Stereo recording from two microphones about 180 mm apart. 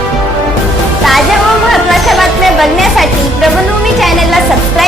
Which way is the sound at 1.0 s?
Centre (ahead or behind).